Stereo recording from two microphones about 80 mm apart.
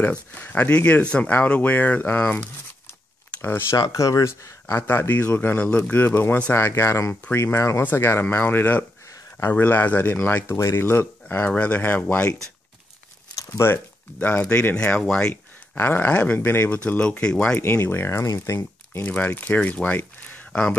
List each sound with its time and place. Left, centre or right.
0.0 s speech: centre
3.7 s speech: left
6.7 s speech: left
13.5 s speech: left
14.2 s speech: centre
15.8 s speech: left
17.6 s speech: left
19.0 s speech: left